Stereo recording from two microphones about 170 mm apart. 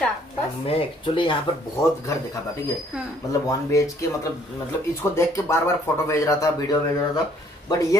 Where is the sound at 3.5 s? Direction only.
20° left (ahead or behind).